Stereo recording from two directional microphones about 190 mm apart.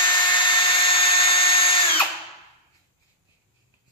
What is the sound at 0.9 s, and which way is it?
Tools, 30° left (ahead or behind).